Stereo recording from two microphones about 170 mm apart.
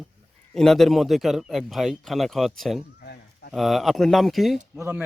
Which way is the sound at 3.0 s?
70° left (ahead or behind).